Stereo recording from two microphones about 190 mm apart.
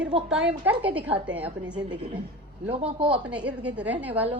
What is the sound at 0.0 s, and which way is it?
A woman's voice, 5° right (ahead or behind).